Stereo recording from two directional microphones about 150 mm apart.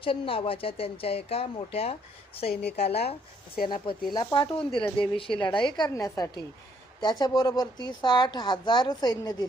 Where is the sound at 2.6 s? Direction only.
90° left.